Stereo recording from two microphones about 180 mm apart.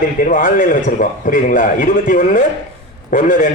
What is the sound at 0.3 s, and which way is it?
A man's voice, 50° left (ahead or behind).